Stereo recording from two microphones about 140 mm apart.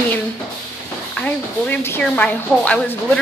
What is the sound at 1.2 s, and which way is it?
Speech, 15° left (ahead or behind).